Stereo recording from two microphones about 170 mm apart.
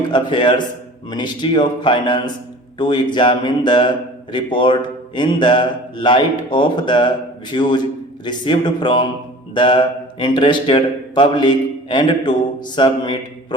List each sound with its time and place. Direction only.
0.1 s a man's voice: 25° left (ahead or behind)